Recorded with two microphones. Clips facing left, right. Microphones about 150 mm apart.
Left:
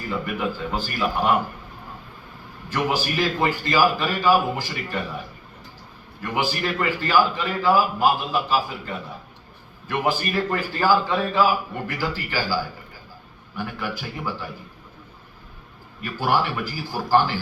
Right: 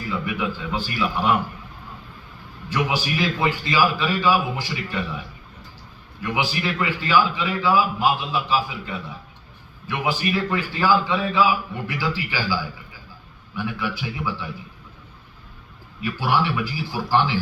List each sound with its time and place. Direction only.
0.3 s a man's voice: 45° left (ahead or behind)
2.7 s a man's voice: 45° left (ahead or behind)
6.2 s a man's voice: 45° left (ahead or behind)
13.6 s a man's voice: 45° left (ahead or behind)
16.0 s a man's voice: 45° left (ahead or behind)